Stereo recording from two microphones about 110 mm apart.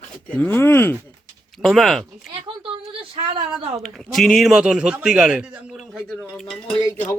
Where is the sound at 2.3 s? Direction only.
55° right (ahead or behind).